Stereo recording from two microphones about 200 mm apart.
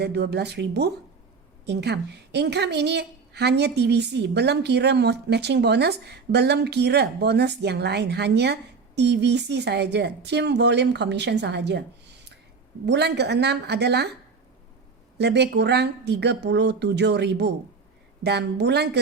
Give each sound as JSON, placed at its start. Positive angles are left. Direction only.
{"t": 0.0, "sound": "a woman's voice", "side_deg": -55}
{"t": 12.8, "sound": "a woman's voice", "side_deg": -55}
{"t": 15.2, "sound": "a woman's voice", "side_deg": -55}